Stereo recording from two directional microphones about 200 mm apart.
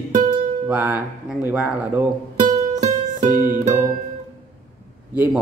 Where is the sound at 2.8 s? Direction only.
40° right (ahead or behind).